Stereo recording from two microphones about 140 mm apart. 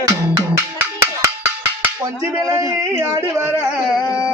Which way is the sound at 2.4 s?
25° right (ahead or behind).